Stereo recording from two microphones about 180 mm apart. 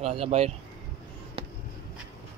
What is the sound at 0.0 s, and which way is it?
Speech, 35° right (ahead or behind).